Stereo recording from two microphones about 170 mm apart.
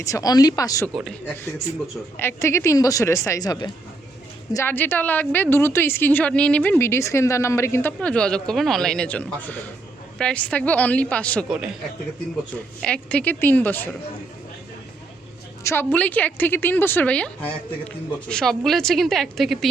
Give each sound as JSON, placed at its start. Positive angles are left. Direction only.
{"t": 0.0, "sound": "speech", "side_deg": 20}
{"t": 2.1, "sound": "a woman's voice", "side_deg": 15}
{"t": 12.8, "sound": "a woman's voice", "side_deg": 5}
{"t": 15.6, "sound": "a woman's voice", "side_deg": 10}